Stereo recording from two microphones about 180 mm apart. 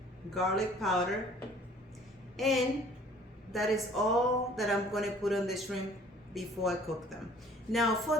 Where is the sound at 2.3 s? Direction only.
Centre (ahead or behind).